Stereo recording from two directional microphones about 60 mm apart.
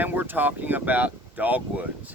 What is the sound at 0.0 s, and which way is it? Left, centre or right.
Speech, right.